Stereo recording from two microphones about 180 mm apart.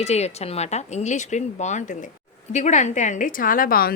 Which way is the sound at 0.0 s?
35° left (ahead or behind).